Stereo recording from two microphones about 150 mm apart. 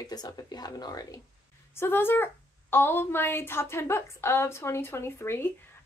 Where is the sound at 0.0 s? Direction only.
25° left (ahead or behind).